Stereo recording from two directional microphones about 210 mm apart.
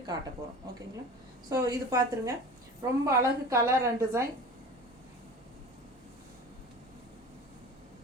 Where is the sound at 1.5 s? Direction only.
15° right (ahead or behind).